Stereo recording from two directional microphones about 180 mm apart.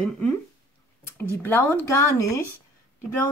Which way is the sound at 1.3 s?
15° left (ahead or behind).